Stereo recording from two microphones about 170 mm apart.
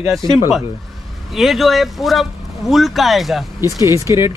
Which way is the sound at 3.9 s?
15° right (ahead or behind).